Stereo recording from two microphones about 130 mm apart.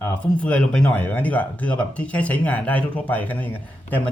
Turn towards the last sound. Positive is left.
turn(degrees=15)  # may be behind; listen again after turning